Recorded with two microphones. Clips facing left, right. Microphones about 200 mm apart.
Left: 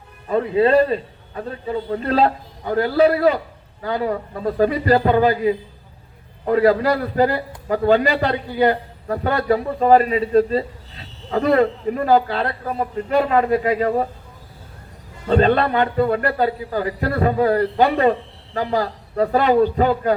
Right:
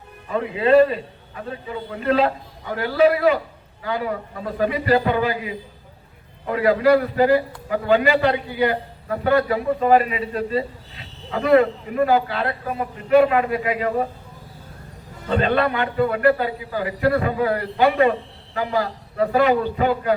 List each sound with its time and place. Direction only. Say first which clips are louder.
0.3 s a man's voice: left 2 dB; 35° left (ahead or behind)
15.3 s a man's voice: left 4 dB; 35° left (ahead or behind)